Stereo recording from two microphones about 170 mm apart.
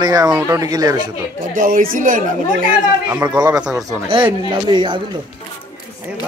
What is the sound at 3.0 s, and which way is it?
Speech, 10° right (ahead or behind).